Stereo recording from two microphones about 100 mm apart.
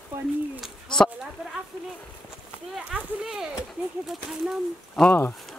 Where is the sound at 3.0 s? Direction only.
10° right (ahead or behind).